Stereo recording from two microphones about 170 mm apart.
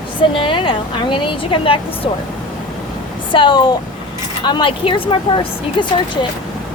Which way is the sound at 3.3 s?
30° left (ahead or behind).